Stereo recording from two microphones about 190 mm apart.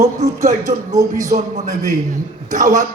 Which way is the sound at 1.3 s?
40° right (ahead or behind).